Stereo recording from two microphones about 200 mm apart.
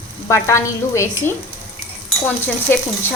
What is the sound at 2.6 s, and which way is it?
Speech, 10° left (ahead or behind).